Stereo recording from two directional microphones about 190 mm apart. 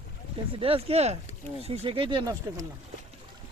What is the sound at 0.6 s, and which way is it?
Speech, 30° right (ahead or behind).